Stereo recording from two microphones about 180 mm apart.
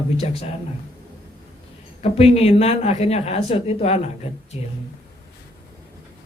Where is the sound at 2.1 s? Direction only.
35° left (ahead or behind).